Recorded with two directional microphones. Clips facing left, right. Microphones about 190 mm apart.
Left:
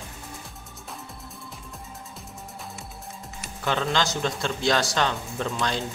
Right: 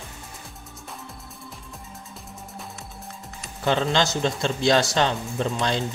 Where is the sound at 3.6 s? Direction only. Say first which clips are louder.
Right 3 dB; 30° right (ahead or behind).